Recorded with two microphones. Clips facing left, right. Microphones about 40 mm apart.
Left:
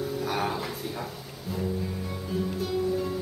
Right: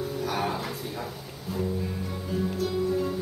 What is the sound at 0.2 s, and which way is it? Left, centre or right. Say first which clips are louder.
Music: right 1 dB; centre.